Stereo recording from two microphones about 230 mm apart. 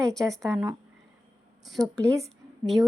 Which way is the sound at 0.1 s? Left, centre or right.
Centre.